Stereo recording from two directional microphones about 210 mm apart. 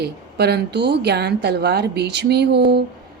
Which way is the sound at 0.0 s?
50° right (ahead or behind).